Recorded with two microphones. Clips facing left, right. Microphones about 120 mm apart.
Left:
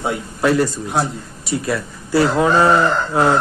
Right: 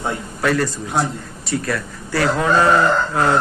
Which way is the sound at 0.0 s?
20° left (ahead or behind).